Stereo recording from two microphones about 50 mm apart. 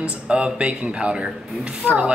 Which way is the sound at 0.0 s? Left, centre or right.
Right.